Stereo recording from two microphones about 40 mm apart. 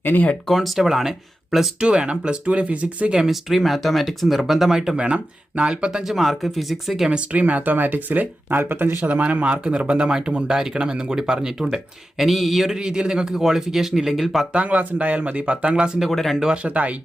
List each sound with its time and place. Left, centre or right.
0.0 s speech: left
0.4 s speech: centre
1.8 s speech: right
3.2 s speech: centre
4.9 s speech: right
5.9 s speech: centre
7.3 s speech: right
9.0 s speech: right; by 12.3 s centre
12.3 s speech: centre
12.7 s speech: centre
14.5 s speech: right
16.0 s speech: centre
16.6 s speech: right